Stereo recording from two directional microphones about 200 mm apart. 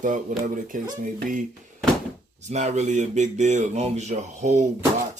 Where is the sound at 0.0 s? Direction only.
40° right (ahead or behind).